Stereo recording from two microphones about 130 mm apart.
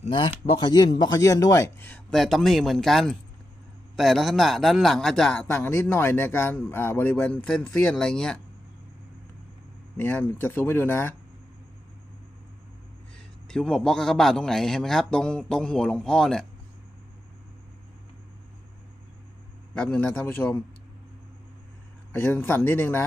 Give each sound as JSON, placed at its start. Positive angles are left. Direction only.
{"t": 0.1, "sound": "speech", "side_deg": 40}
{"t": 1.8, "sound": "a man's voice", "side_deg": 10}
{"t": 5.5, "sound": "a man's voice", "side_deg": 15}
{"t": 10.0, "sound": "a man's voice", "side_deg": 15}
{"t": 13.5, "sound": "a man's voice", "side_deg": 5}
{"t": 19.7, "sound": "a man's voice", "side_deg": 10}
{"t": 22.1, "sound": "a man's voice", "side_deg": 15}